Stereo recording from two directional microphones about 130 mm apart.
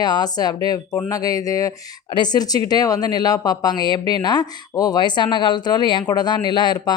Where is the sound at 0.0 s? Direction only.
30° left (ahead or behind).